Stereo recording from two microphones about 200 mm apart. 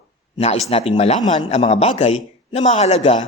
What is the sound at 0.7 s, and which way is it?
A man's voice, 30° left (ahead or behind).